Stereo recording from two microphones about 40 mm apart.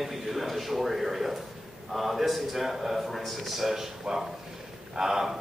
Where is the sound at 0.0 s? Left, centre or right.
Centre.